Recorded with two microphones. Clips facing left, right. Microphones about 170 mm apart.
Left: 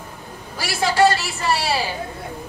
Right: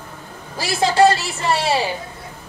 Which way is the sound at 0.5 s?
25° right (ahead or behind).